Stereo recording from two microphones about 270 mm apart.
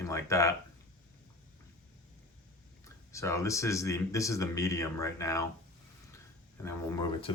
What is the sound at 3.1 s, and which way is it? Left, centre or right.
Speech, centre.